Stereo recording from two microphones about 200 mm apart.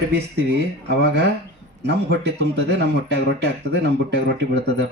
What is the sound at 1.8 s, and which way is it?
Speech, 55° right (ahead or behind).